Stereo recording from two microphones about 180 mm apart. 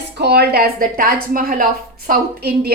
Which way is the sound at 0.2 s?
65° right (ahead or behind).